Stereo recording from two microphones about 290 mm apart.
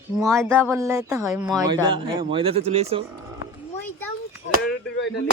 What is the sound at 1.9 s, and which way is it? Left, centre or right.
Speech, centre.